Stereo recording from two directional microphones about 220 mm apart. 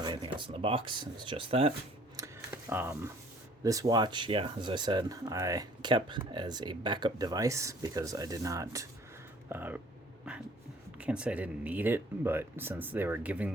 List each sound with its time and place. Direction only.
0.0 s speech: 20° right (ahead or behind)
2.1 s a sound: 10° right (ahead or behind)
3.6 s speech: 15° right (ahead or behind)
10.9 s speech: 5° right (ahead or behind)